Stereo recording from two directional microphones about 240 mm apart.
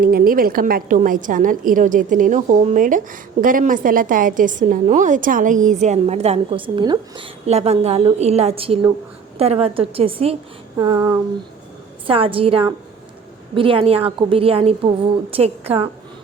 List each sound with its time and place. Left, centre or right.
0.0 s a woman's voice: right
10.8 s a sound: centre
12.0 s a woman's voice: right